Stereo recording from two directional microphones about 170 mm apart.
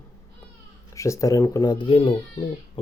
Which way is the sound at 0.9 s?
20° left (ahead or behind).